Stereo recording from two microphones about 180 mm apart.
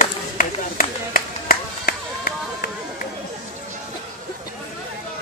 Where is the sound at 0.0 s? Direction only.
50° left (ahead or behind).